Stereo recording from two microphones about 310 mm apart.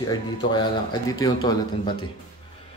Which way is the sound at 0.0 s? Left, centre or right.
Centre.